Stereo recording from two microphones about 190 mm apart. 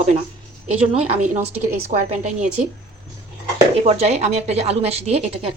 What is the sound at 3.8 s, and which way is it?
Speech, 35° right (ahead or behind).